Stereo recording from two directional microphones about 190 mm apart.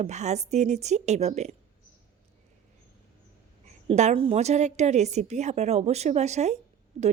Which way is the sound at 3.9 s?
35° right (ahead or behind).